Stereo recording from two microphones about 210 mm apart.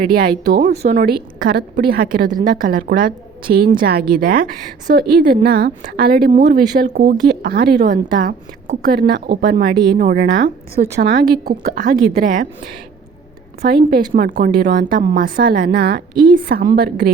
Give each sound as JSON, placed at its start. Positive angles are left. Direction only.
{"t": 0.0, "sound": "speech", "side_deg": -45}
{"t": 6.9, "sound": "speech", "side_deg": -35}
{"t": 8.9, "sound": "speech", "side_deg": -45}
{"t": 9.7, "sound": "a woman's voice", "side_deg": -20}
{"t": 10.0, "sound": "a woman's voice", "side_deg": -45}
{"t": 13.6, "sound": "speech", "side_deg": -45}